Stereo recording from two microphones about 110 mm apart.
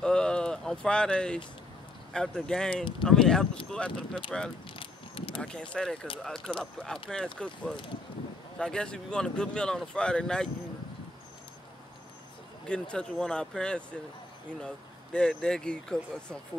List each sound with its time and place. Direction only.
0.0 s a sound: 5° left (ahead or behind)
2.1 s speech: 5° left (ahead or behind)
4.7 s a sound: 55° left (ahead or behind)
5.4 s speech: 10° left (ahead or behind)
12.6 s speech: 10° left (ahead or behind)
15.1 s speech: 10° left (ahead or behind)